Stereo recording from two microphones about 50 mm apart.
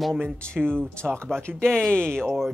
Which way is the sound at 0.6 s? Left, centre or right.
Centre.